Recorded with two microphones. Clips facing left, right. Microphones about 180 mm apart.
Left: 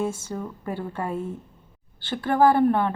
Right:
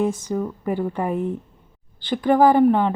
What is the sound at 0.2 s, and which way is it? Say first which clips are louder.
A woman's voice: right 7 dB; 15° right (ahead or behind).